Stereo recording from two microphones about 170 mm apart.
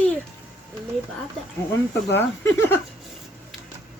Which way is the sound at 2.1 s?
15° left (ahead or behind).